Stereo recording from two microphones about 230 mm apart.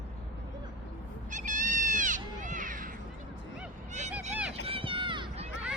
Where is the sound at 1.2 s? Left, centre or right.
Right.